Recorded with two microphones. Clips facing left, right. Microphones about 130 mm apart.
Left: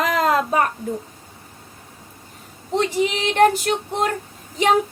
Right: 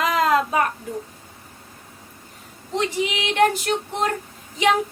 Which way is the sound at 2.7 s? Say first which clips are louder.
Left 3 dB; 35° left (ahead or behind).